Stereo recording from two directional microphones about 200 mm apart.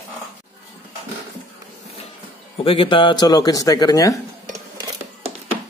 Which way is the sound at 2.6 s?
25° left (ahead or behind).